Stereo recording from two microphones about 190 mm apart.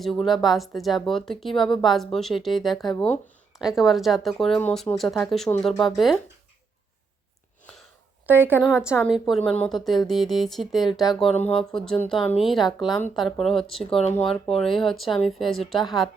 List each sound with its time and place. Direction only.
0.0 s speech: centre (ahead or behind)
8.3 s a woman's voice: 10° right (ahead or behind)
14.0 s speech: 35° left (ahead or behind)
14.3 s speech: centre (ahead or behind)